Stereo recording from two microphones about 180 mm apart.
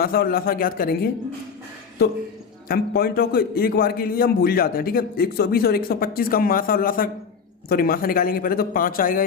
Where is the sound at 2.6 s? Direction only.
60° left (ahead or behind).